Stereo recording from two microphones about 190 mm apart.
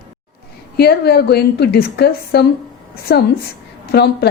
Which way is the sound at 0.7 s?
55° left (ahead or behind).